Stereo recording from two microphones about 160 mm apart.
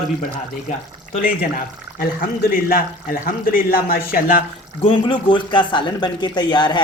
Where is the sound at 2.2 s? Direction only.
65° left (ahead or behind).